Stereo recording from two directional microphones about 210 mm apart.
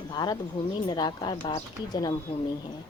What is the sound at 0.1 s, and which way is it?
A woman's voice, 20° left (ahead or behind).